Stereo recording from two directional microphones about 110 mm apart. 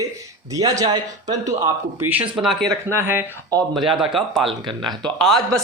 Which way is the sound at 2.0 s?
15° right (ahead or behind).